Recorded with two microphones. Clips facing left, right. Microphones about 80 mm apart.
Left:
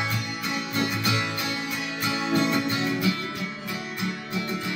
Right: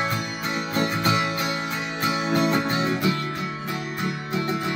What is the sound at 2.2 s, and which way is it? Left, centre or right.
Music, right.